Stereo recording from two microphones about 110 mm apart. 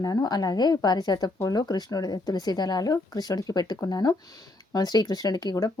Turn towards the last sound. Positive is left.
turn(degrees=35)  # may be behind; listen again after turning